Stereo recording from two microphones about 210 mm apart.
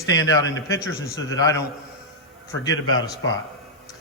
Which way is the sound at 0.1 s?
65° left (ahead or behind).